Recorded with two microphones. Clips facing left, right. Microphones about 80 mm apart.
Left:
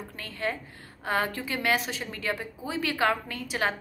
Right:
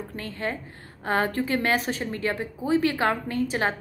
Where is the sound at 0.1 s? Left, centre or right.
Right.